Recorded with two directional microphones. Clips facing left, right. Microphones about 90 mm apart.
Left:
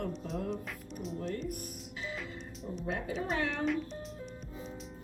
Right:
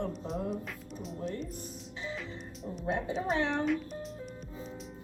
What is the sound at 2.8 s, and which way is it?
Speech, 30° right (ahead or behind).